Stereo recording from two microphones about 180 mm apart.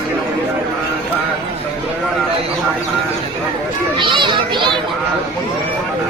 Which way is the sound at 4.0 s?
25° right (ahead or behind).